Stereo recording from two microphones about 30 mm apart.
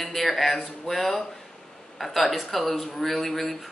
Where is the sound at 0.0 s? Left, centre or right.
Centre.